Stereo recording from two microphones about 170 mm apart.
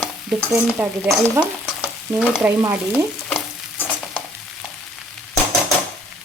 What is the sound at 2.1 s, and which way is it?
Speech, 5° right (ahead or behind).